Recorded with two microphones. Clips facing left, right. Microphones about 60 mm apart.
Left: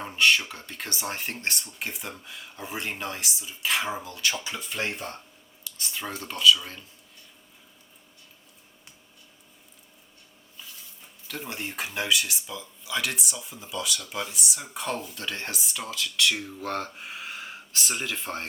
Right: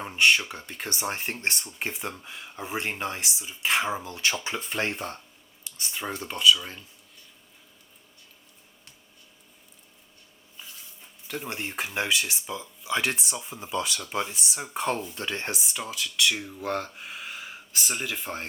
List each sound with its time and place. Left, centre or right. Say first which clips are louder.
0.2 s speech: right 1 dB; right
5.6 s speech: right 1 dB; right
11.3 s speech: right 2 dB; right
16.3 s speech: right 1 dB; centre
17.0 s speech: left 1 dB; left
17.4 s speech: left 1 dB; centre